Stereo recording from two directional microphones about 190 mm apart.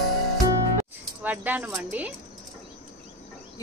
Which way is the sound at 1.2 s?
10° right (ahead or behind).